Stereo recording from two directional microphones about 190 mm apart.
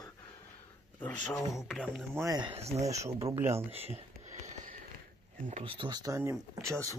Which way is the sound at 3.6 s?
30° right (ahead or behind).